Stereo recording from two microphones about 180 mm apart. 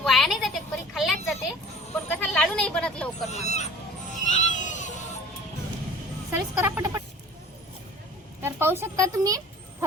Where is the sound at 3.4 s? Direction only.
40° left (ahead or behind).